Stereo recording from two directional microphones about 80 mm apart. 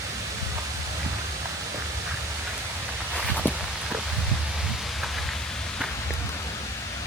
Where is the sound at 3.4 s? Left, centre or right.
Centre.